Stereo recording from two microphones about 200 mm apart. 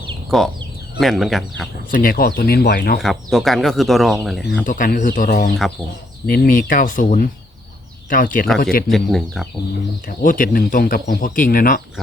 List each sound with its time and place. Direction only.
0.3 s speech: centre (ahead or behind)
1.9 s a man's voice: 45° left (ahead or behind)
3.0 s speech: centre (ahead or behind)
4.6 s a man's voice: 45° left (ahead or behind)
8.4 s speech: centre (ahead or behind)
10.2 s a man's voice: 40° left (ahead or behind)